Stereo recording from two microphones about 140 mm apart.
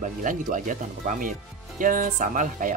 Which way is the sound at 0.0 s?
70° right (ahead or behind).